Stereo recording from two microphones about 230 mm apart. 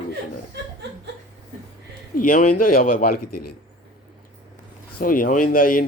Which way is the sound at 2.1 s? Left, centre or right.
Left.